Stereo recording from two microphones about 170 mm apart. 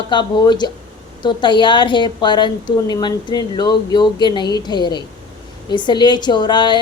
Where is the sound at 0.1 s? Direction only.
25° left (ahead or behind).